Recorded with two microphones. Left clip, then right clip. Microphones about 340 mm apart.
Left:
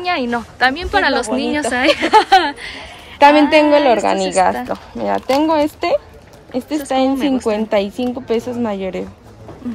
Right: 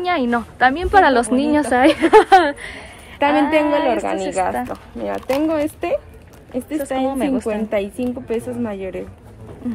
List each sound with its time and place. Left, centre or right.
0.0 s a woman's voice: centre
3.2 s a woman's voice: left
7.1 s a woman's voice: centre
7.4 s a woman's voice: left